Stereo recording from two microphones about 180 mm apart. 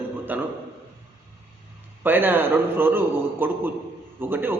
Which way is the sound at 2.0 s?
10° right (ahead or behind).